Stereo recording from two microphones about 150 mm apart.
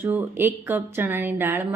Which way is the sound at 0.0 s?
15° right (ahead or behind).